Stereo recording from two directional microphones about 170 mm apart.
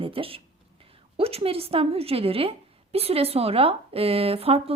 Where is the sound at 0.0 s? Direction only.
35° right (ahead or behind).